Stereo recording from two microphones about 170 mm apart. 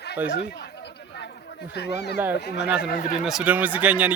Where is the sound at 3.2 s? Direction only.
5° right (ahead or behind).